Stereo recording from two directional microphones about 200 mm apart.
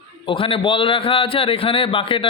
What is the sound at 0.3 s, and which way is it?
A man's voice, 25° left (ahead or behind).